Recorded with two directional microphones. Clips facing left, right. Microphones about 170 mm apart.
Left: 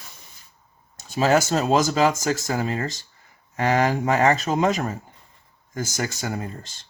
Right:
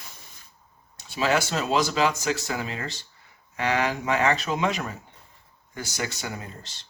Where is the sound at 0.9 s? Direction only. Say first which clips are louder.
Left 5 dB; 45° left (ahead or behind).